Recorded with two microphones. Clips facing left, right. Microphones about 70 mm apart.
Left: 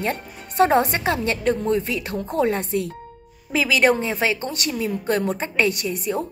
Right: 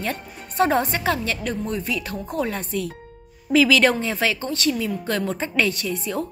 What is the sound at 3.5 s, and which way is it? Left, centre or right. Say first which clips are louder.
A woman's voice: right 2 dB; centre.